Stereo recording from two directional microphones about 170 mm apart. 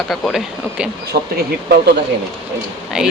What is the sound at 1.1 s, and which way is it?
Speech, 60° right (ahead or behind).